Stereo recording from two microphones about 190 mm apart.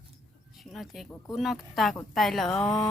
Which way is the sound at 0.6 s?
Centre (ahead or behind).